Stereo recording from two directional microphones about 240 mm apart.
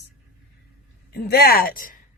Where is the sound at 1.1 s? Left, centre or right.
Left.